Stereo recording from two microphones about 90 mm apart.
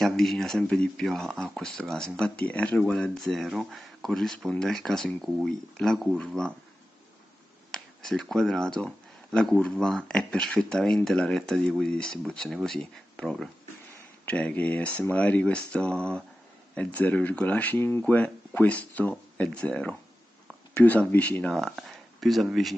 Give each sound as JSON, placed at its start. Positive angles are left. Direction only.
{"t": 0.0, "sound": "speech", "side_deg": 5}
{"t": 7.7, "sound": "speech", "side_deg": 5}